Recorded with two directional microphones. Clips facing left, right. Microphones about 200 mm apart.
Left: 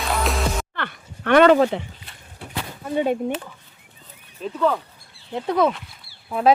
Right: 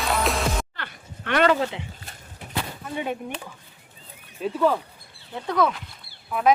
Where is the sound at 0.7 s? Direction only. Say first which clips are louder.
Left 7 dB; 55° left (ahead or behind).